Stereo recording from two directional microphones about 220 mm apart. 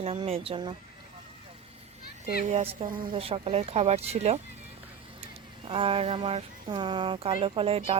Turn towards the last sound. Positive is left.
turn(degrees=-25)  # may be behind; listen again after turning